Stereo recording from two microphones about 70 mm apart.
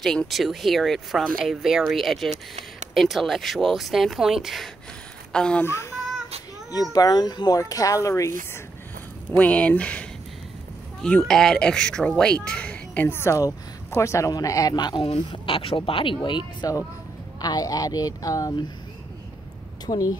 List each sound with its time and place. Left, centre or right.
0.0 s speech: centre
0.3 s speech: centre
5.3 s speech: centre
5.7 s speech: left
6.7 s speech: left
9.4 s a woman's voice: left
13.2 s speech: left
14.3 s speech: left
16.2 s speech: left
19.9 s speech: left